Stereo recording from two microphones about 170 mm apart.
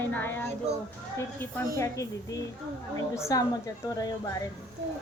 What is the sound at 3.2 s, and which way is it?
Speech, 20° left (ahead or behind).